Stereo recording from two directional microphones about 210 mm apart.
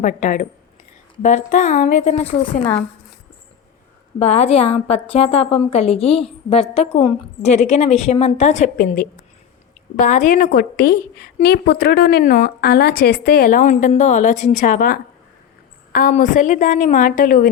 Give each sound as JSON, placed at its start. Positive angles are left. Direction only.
{"t": 0.0, "sound": "a woman's voice", "side_deg": 35}
{"t": 4.2, "sound": "a woman's voice", "side_deg": 30}